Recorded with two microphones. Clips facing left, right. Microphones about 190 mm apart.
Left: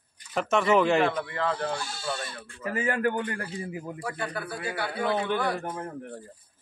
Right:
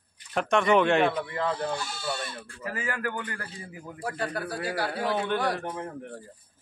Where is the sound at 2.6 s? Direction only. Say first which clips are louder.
Left 6 dB; 25° left (ahead or behind).